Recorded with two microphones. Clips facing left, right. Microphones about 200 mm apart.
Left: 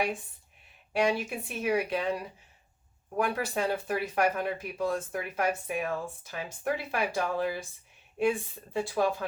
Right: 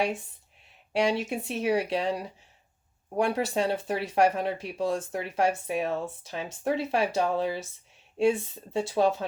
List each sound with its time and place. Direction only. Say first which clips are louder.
0.9 s speech: right 2 dB; 25° right (ahead or behind)